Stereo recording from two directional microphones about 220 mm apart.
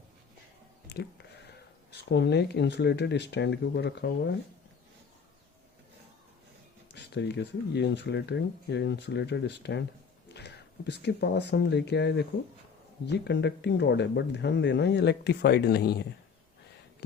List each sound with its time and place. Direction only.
0.9 s speech: 50° left (ahead or behind)
6.9 s speech: 50° left (ahead or behind)